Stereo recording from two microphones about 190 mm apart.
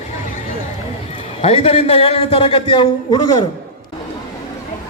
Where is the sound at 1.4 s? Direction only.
30° left (ahead or behind).